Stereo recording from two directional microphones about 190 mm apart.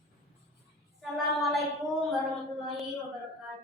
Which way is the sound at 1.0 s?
Centre (ahead or behind).